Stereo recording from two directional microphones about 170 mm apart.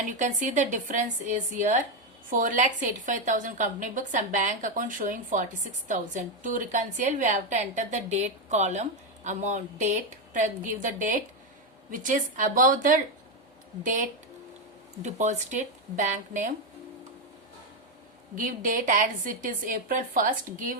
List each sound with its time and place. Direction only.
0.1 s a woman's voice: 45° right (ahead or behind)
18.3 s a woman's voice: 50° right (ahead or behind)